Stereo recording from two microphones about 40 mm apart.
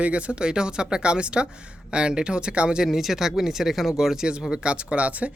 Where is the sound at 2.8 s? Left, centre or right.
Centre.